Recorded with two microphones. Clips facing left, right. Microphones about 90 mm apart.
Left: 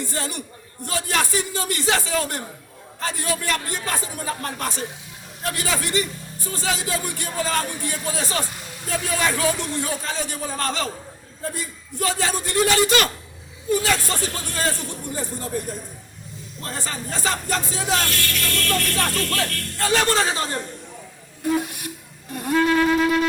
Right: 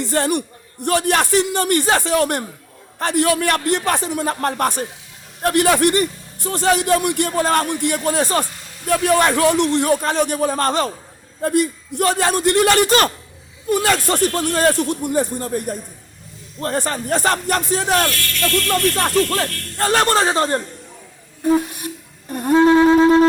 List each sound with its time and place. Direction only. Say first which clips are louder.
0.0 s a man's voice: right 10 dB; 60° right (ahead or behind)
4.4 s a man's voice: right 8 dB; 55° right (ahead or behind)
11.4 s a man's voice: right 13 dB; 65° right (ahead or behind)
16.7 s a man's voice: right 9 dB; 60° right (ahead or behind)
19.3 s speech: right 4 dB; 40° right (ahead or behind)
21.4 s a sound: right 6 dB; 30° right (ahead or behind)
22.3 s wind instrument: right 7 dB; 45° right (ahead or behind)
22.5 s a sound: right 7 dB; 25° right (ahead or behind)